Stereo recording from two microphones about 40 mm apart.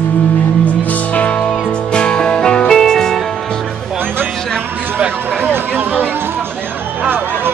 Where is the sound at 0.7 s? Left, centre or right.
Left.